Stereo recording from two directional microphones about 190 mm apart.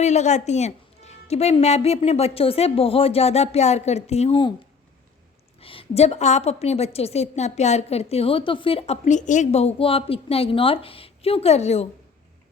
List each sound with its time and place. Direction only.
0.0 s a woman's voice: 35° left (ahead or behind)
5.5 s a woman's voice: 30° left (ahead or behind)